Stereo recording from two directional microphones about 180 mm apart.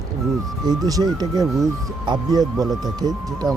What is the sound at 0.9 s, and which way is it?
Speech, 20° right (ahead or behind).